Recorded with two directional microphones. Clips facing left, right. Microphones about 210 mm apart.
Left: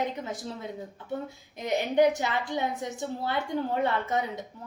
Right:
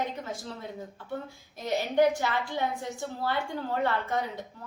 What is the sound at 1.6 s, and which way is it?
A woman's voice, 20° left (ahead or behind).